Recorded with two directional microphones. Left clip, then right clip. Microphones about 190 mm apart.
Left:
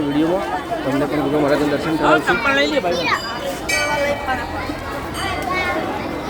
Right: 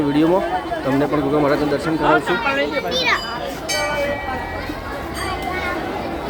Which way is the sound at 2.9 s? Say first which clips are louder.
Right 1 dB; 45° right (ahead or behind).